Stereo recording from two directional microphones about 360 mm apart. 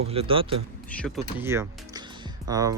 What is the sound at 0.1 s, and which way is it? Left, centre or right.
Speech, centre.